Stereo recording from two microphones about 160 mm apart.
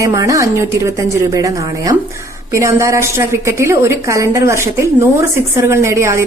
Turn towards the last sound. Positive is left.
turn(degrees=-15)  # may be behind; listen again after turning